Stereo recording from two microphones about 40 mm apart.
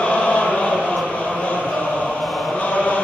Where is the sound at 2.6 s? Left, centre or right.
Left.